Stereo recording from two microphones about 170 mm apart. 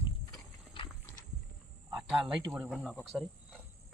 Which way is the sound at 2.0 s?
Centre (ahead or behind).